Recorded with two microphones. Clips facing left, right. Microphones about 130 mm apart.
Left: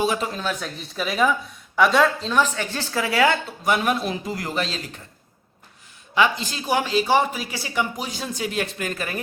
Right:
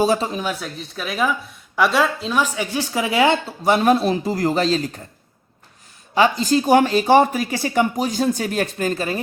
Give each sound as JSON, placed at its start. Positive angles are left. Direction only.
{"t": 0.0, "sound": "speech", "side_deg": -35}
{"t": 0.3, "sound": "a woman's voice", "side_deg": -15}
{"t": 0.6, "sound": "a woman's voice", "side_deg": 0}
{"t": 6.1, "sound": "speech", "side_deg": -40}